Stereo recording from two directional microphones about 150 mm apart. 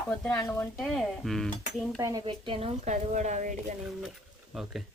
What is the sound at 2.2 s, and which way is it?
A woman's voice, 40° right (ahead or behind).